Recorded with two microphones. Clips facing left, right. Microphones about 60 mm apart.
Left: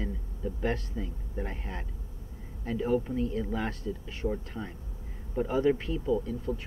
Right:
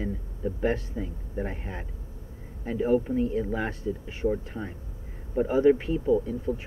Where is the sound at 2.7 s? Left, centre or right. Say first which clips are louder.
Right 4 dB; right.